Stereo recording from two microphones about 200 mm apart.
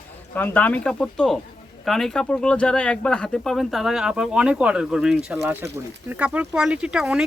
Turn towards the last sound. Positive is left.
turn(degrees=-5)  # may be behind; listen again after turning